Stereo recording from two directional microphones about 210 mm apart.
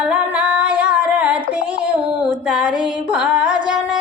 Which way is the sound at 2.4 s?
5° right (ahead or behind).